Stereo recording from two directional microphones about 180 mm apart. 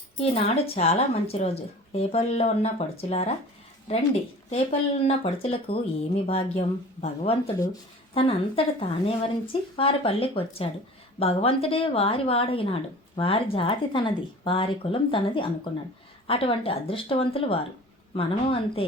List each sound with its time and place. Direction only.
0.2 s speech: 35° left (ahead or behind)